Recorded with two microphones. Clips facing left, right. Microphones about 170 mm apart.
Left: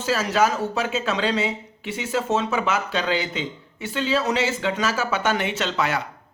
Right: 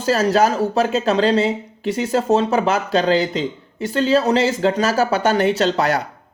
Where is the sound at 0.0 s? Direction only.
40° right (ahead or behind).